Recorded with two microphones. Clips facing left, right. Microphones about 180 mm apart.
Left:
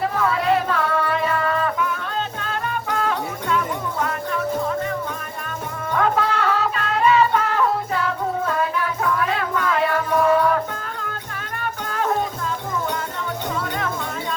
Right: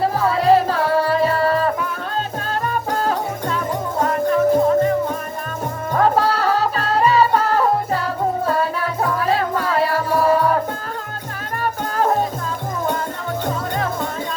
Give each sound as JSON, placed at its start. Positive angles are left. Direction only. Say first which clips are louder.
{"t": 0.0, "sound": "music", "louder": "right 4 dB", "side_deg": -30}
{"t": 11.6, "sound": "music", "louder": "right 5 dB", "side_deg": -40}